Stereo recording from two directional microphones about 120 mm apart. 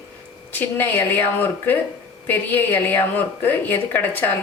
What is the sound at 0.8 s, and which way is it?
A woman's voice, 15° left (ahead or behind).